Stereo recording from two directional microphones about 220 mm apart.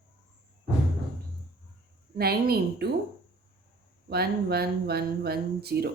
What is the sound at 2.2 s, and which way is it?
Speech, 45° right (ahead or behind).